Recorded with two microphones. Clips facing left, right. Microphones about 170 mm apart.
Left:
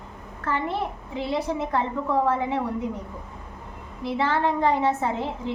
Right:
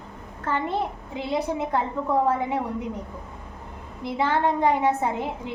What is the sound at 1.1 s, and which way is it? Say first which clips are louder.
Speech: even; 20° right (ahead or behind).